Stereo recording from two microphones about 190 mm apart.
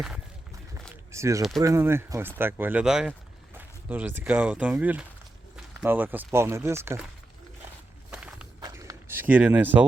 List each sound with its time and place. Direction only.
1.1 s speech: 15° right (ahead or behind)
8.1 s walk: 5° right (ahead or behind)
8.6 s a sound: 15° right (ahead or behind)